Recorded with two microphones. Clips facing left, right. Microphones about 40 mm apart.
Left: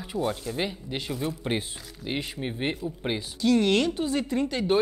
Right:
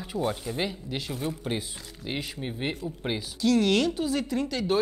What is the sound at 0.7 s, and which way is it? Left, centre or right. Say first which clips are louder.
Speech: left 1 dB; centre.